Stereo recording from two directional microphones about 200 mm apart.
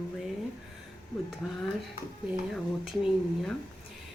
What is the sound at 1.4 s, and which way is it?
Speech, centre (ahead or behind).